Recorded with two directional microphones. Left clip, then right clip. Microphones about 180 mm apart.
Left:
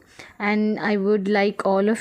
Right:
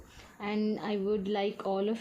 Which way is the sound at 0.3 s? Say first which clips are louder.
Left 11 dB; 40° left (ahead or behind).